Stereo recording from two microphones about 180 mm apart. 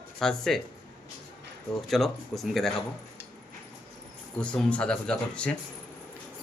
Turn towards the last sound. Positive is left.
turn(degrees=5)  # may be behind; listen again after turning